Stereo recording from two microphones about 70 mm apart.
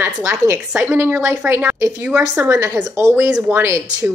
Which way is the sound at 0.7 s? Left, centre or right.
Right.